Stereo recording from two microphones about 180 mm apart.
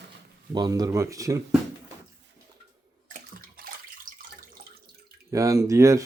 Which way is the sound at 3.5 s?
55° right (ahead or behind).